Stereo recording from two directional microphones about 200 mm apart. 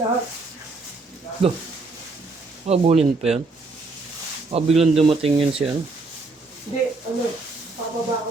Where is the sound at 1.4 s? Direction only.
30° right (ahead or behind).